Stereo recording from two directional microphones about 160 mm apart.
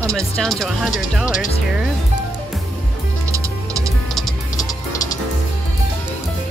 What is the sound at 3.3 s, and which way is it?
Music, 20° right (ahead or behind).